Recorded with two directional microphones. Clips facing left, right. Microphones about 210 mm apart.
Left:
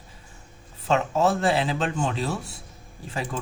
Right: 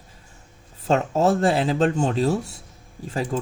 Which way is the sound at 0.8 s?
45° right (ahead or behind).